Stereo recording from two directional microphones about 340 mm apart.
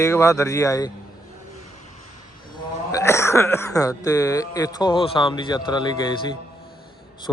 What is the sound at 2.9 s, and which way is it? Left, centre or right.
Speech, centre.